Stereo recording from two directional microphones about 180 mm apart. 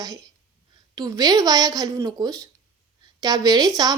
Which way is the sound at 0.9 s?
20° right (ahead or behind).